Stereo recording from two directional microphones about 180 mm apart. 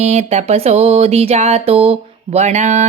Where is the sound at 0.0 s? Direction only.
35° right (ahead or behind).